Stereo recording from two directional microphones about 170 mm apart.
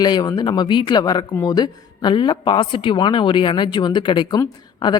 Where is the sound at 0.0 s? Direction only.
25° left (ahead or behind).